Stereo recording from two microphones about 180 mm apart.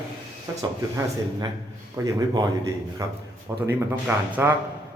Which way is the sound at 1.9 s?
20° right (ahead or behind).